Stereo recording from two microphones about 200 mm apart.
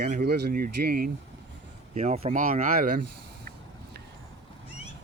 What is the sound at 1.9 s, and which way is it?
Speech, 35° right (ahead or behind).